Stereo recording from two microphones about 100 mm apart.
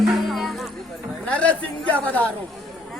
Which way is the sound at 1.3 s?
15° left (ahead or behind).